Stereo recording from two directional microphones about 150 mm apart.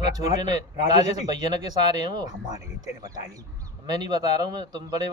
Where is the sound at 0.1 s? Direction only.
25° right (ahead or behind).